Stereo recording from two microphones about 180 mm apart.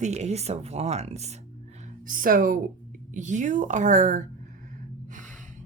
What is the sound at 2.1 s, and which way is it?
A woman's voice, 50° right (ahead or behind).